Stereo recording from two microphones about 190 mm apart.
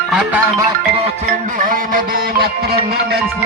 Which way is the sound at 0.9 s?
35° right (ahead or behind).